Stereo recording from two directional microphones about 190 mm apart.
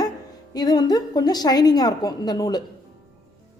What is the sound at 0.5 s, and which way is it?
A woman's voice, 20° left (ahead or behind).